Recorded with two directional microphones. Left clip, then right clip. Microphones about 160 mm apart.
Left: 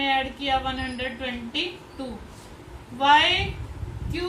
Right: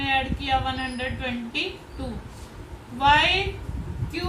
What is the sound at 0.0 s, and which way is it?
A woman's voice, 15° right (ahead or behind).